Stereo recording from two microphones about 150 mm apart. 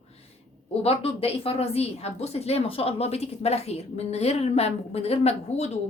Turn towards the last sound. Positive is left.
turn(degrees=45)  # may be behind; listen again after turning